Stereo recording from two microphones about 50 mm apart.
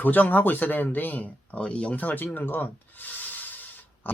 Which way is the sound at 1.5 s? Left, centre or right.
Left.